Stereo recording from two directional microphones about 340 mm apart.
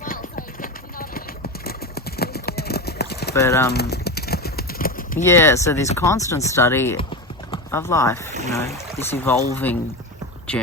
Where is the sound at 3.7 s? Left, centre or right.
Left.